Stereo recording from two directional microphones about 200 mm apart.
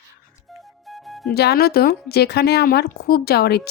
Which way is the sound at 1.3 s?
50° left (ahead or behind).